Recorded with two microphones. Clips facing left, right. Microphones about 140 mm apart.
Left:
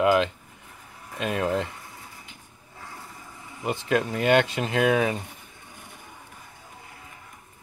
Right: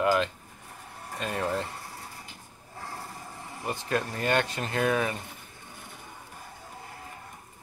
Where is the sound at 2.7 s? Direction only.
35° right (ahead or behind).